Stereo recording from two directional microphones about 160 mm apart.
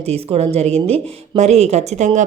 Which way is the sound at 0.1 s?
40° right (ahead or behind).